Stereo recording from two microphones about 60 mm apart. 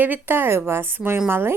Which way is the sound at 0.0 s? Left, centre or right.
Right.